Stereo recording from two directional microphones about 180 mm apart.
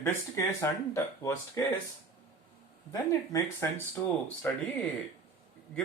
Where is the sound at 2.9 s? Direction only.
15° left (ahead or behind).